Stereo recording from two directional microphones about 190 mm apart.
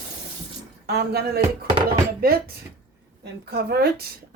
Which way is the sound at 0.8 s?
55° right (ahead or behind).